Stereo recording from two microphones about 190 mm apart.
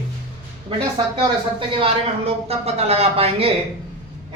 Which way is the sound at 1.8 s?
30° right (ahead or behind).